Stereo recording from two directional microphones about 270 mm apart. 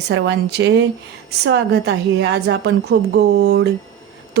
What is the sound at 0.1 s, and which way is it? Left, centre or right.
A woman's voice, right.